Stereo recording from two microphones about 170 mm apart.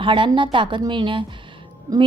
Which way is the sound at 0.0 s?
30° right (ahead or behind).